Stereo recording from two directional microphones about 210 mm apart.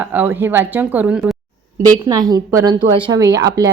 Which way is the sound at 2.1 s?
20° right (ahead or behind).